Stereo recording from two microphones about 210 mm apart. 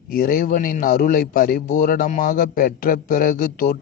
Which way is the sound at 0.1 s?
45° left (ahead or behind).